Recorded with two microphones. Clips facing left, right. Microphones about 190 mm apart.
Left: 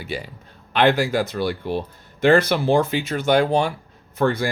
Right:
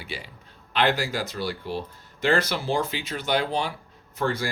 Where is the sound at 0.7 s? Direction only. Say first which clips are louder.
Left 6 dB; 55° left (ahead or behind).